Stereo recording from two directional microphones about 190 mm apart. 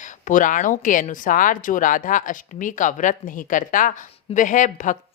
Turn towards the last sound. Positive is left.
turn(degrees=40)  # may be behind; listen again after turning